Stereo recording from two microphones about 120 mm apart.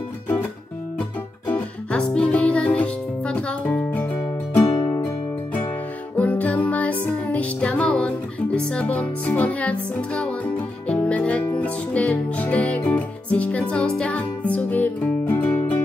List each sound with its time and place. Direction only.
1.5 s music: 10° left (ahead or behind)
4.6 s music: 40° left (ahead or behind)
5.0 s music: 15° left (ahead or behind)